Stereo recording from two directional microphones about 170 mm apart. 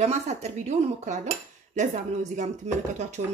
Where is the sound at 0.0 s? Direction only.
40° right (ahead or behind).